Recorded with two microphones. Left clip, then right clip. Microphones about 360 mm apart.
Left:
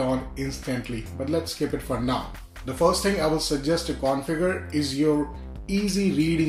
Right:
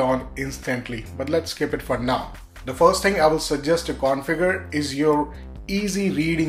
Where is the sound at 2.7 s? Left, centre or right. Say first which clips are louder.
Right 5 dB; centre.